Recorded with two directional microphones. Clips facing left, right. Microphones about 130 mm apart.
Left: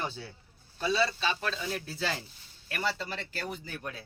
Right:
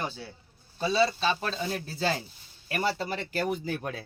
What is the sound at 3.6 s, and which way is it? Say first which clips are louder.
Speech: right 7 dB; 65° right (ahead or behind).